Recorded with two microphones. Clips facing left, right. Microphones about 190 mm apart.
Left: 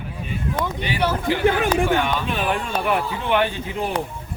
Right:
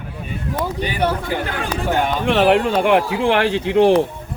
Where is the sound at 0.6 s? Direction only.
40° right (ahead or behind).